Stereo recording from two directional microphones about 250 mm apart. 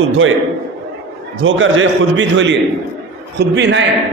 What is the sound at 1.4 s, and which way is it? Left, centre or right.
A man's voice, right.